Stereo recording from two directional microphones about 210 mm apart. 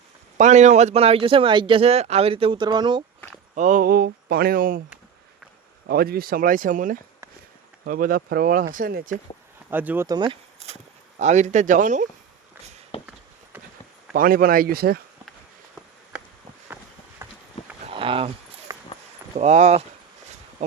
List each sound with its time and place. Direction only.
0.3 s speech: 35° right (ahead or behind); by 3.0 s 20° right (ahead or behind)
3.5 s speech: 35° right (ahead or behind)
5.9 s speech: 45° right (ahead or behind)
9.6 s speech: 10° right (ahead or behind); by 12.0 s 35° right (ahead or behind)
14.1 s speech: 45° right (ahead or behind)
16.7 s walk: 10° right (ahead or behind)
17.2 s a sound: 10° right (ahead or behind)
17.8 s a sound: 25° right (ahead or behind)
19.4 s speech: 35° right (ahead or behind)